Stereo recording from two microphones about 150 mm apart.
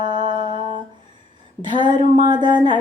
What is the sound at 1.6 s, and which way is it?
Music, 30° right (ahead or behind).